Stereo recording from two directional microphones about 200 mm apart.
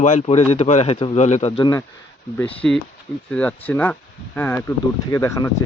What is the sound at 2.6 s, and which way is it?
Speech, centre (ahead or behind).